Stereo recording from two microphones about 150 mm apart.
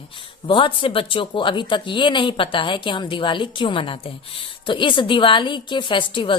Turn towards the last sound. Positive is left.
turn(degrees=35)  # may be behind; listen again after turning